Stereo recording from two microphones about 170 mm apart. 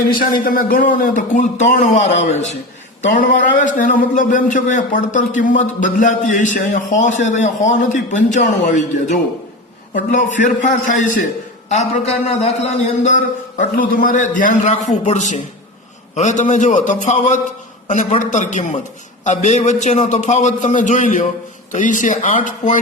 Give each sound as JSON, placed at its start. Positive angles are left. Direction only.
{"t": 0.3, "sound": "a man's voice", "side_deg": 55}